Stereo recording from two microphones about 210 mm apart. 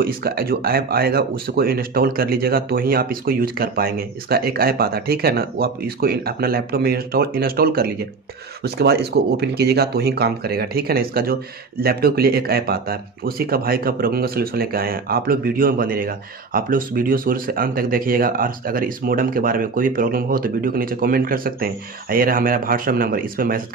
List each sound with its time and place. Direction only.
0.0 s speech: 45° right (ahead or behind)